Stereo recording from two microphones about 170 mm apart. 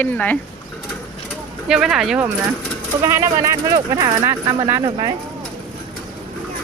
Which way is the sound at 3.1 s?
15° right (ahead or behind).